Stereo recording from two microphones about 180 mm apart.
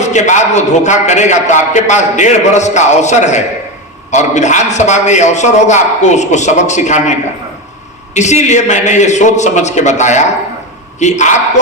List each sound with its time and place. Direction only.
0.0 s a man's voice: 40° left (ahead or behind)
8.1 s a man's voice: 40° left (ahead or behind)